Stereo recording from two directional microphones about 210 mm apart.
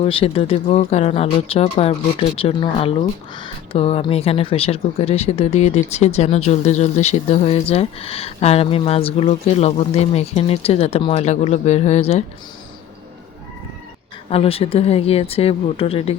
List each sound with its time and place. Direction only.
0.0 s speech: 25° left (ahead or behind)
14.3 s speech: 30° left (ahead or behind)